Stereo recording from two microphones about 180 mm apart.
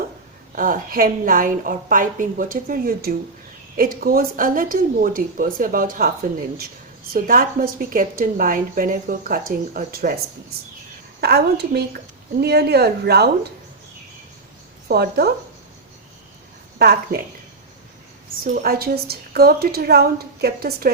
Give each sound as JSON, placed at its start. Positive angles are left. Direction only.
{"t": 0.5, "sound": "a woman's voice", "side_deg": -50}
{"t": 7.1, "sound": "a woman's voice", "side_deg": -55}
{"t": 11.2, "sound": "a woman's voice", "side_deg": -65}
{"t": 14.8, "sound": "a woman's voice", "side_deg": -65}
{"t": 16.7, "sound": "a woman's voice", "side_deg": -60}
{"t": 18.5, "sound": "a woman's voice", "side_deg": -55}